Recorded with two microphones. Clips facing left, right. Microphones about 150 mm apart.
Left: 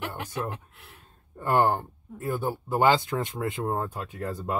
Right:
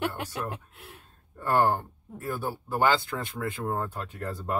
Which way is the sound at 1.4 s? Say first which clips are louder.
Left 1 dB; 20° left (ahead or behind).